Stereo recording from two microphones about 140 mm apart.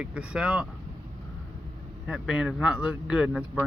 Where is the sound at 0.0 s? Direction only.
5° right (ahead or behind).